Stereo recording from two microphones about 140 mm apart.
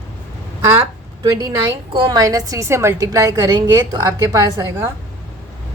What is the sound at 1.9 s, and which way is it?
A woman's voice, 35° right (ahead or behind).